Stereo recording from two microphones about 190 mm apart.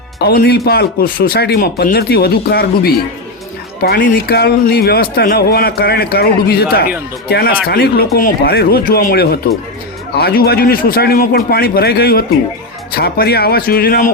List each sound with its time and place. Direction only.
0.2 s a man's voice: 55° left (ahead or behind)
3.8 s a man's voice: 65° left (ahead or behind)